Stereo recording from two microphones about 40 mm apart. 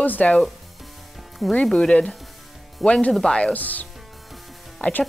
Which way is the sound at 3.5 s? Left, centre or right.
Left.